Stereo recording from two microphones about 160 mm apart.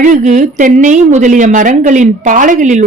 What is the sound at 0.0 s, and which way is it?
A woman's voice, 50° right (ahead or behind).